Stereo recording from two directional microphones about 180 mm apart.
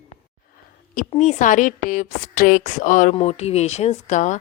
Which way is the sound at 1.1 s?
40° left (ahead or behind).